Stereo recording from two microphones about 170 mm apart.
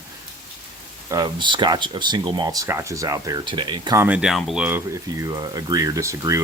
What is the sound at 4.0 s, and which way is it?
Speech, 5° right (ahead or behind).